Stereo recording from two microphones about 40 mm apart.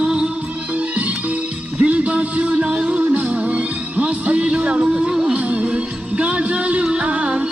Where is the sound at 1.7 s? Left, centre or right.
Right.